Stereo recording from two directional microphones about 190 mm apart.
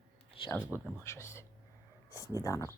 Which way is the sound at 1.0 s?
15° left (ahead or behind).